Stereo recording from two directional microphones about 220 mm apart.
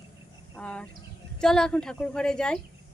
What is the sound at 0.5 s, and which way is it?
Speech, 5° left (ahead or behind).